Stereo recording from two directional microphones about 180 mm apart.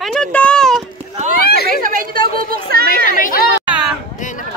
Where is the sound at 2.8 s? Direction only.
50° left (ahead or behind).